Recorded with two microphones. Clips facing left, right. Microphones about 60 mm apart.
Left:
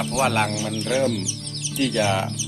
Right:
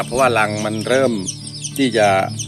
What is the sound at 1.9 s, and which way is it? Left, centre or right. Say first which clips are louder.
Speech: right 9 dB; right.